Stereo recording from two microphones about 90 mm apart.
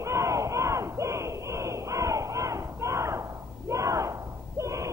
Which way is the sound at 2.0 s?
35° right (ahead or behind).